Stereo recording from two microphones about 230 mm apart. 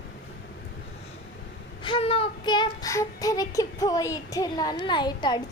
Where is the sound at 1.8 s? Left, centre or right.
Left.